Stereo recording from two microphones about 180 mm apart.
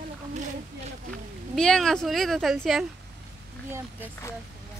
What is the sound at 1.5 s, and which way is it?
Speech, 5° left (ahead or behind).